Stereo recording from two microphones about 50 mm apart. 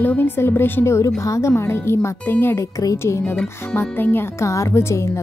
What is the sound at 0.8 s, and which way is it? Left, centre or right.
Speech, left.